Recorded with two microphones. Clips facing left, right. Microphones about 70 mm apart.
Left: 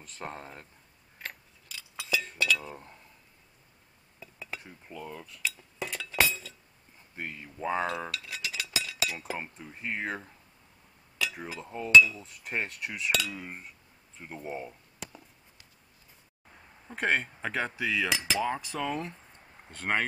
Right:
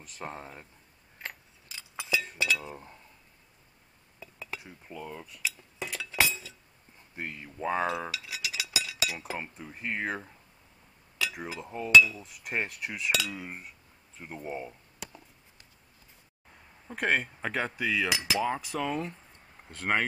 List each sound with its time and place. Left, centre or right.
0.0 s cutlery: centre
1.2 s chink: right
2.3 s speech: centre
2.7 s cutlery: centre
4.2 s cutlery: centre
5.4 s chink: centre
7.2 s cutlery: centre
7.8 s chink: centre
9.3 s cutlery: centre
11.1 s speech: centre
11.7 s cutlery: centre
16.8 s cutlery: centre